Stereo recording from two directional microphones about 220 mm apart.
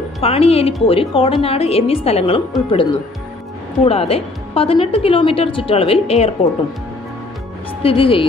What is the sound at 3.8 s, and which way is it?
A woman's voice, 25° left (ahead or behind).